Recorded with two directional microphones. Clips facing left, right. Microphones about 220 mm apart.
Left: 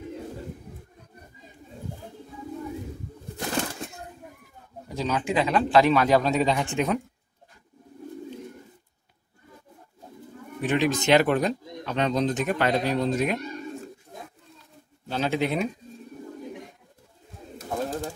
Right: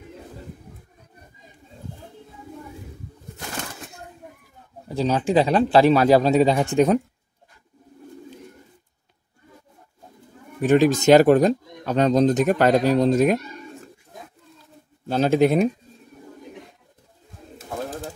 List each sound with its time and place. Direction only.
4.8 s a man's voice: 30° right (ahead or behind)
10.6 s speech: 45° right (ahead or behind)
15.0 s speech: 45° right (ahead or behind)